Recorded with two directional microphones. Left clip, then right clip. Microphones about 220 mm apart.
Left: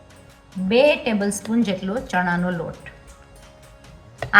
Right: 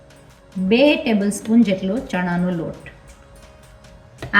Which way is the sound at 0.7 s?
40° left (ahead or behind).